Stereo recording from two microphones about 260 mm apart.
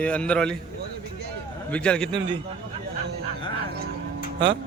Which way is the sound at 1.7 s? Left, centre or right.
Centre.